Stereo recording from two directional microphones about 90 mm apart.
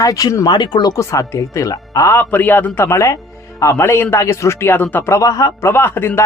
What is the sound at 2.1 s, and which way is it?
Speech, 20° left (ahead or behind).